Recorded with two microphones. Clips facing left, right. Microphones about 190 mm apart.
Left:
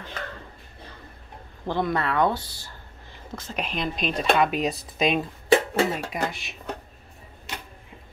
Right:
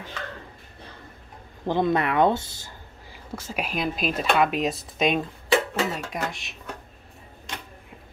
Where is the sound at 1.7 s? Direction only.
20° right (ahead or behind).